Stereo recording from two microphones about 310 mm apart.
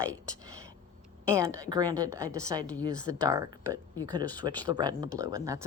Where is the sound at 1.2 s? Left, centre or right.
Centre.